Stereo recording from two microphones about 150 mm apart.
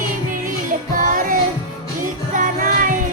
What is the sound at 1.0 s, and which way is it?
Music, 65° right (ahead or behind).